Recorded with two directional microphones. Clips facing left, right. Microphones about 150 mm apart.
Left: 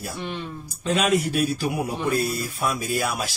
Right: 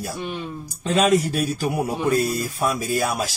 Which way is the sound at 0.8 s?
35° right (ahead or behind).